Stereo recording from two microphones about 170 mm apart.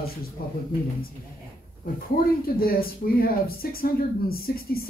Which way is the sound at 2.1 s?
60° left (ahead or behind).